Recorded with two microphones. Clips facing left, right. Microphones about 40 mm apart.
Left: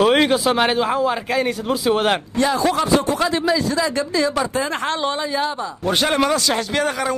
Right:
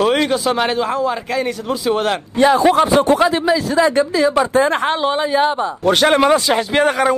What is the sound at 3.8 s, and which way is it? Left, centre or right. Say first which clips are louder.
A man's voice: right 6 dB; right.